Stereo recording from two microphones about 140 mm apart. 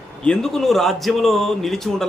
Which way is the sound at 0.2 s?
5° left (ahead or behind).